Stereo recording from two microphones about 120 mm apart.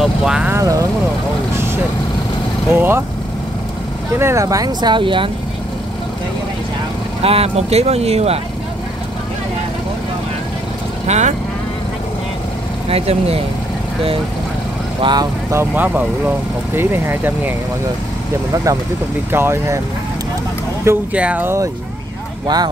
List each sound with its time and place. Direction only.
0.0 s vehicle: 5° right (ahead or behind)
0.5 s vehicle: 25° right (ahead or behind)
2.7 s speech: 20° right (ahead or behind)
4.2 s speech: 25° right (ahead or behind)
4.9 s speech: 45° right (ahead or behind)
7.2 s speech: 55° right (ahead or behind)
11.1 s speech: 75° right (ahead or behind)
12.9 s speech: 55° right (ahead or behind)
15.0 s speech: 40° right (ahead or behind)
15.5 s speech: 15° right (ahead or behind)
18.5 s speech: 30° right (ahead or behind)
20.8 s speech: 20° right (ahead or behind)